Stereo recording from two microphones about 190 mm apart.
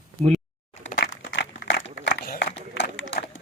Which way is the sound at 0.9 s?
70° left (ahead or behind).